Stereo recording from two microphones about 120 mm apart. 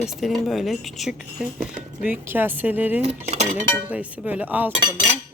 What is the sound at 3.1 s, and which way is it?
Speech, 70° right (ahead or behind).